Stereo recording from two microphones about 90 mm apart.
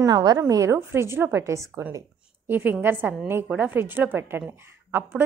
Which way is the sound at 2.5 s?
20° right (ahead or behind).